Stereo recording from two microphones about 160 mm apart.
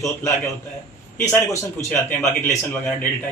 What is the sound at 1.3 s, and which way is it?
Speech, 10° left (ahead or behind).